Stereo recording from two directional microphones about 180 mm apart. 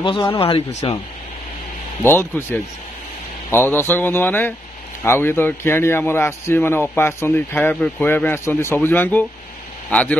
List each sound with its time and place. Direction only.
0.0 s speech: 30° left (ahead or behind)
2.0 s a man's voice: 15° left (ahead or behind)